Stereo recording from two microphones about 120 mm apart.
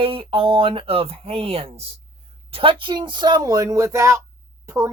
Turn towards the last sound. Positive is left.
turn(degrees=-25)  # may be behind; listen again after turning